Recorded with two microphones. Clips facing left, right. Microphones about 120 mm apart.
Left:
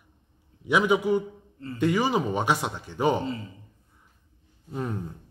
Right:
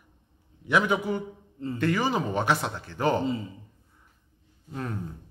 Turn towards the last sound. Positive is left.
turn(degrees=10)  # may be behind; listen again after turning